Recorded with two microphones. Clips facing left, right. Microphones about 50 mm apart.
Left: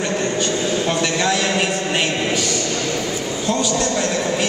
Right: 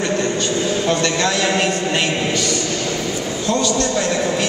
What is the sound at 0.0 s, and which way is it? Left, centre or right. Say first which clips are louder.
A man's voice: right 1 dB; centre.